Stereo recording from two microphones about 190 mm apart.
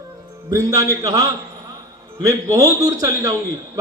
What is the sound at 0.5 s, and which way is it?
A man's voice, 15° right (ahead or behind).